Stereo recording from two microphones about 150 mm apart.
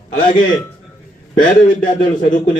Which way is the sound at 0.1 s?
60° left (ahead or behind).